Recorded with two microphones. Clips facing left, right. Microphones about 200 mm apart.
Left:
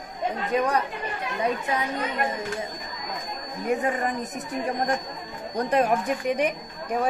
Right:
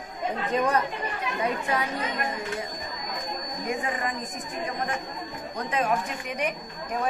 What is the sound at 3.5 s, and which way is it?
A woman's voice, 35° left (ahead or behind).